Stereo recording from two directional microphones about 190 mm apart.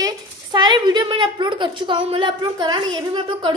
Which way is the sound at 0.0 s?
25° right (ahead or behind).